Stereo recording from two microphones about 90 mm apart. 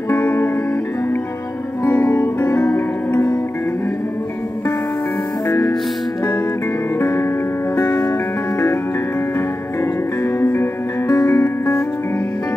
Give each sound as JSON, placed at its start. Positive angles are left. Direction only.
{"t": 0.1, "sound": "music", "side_deg": 25}
{"t": 1.9, "sound": "music", "side_deg": 30}
{"t": 5.5, "sound": "music", "side_deg": 30}
{"t": 7.0, "sound": "music", "side_deg": 30}
{"t": 10.2, "sound": "music", "side_deg": 30}